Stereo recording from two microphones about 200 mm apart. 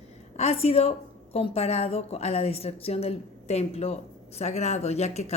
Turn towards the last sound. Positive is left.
turn(degrees=35)  # may be behind; listen again after turning